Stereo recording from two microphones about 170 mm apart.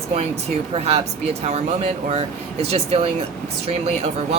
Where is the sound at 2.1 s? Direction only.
35° right (ahead or behind).